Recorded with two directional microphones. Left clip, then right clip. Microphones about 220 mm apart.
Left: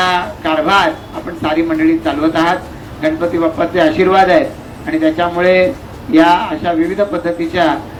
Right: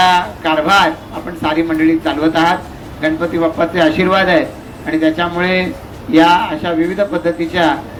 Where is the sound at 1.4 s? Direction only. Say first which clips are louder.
Even; 45° right (ahead or behind).